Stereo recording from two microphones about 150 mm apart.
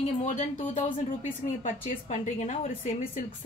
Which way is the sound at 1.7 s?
45° left (ahead or behind).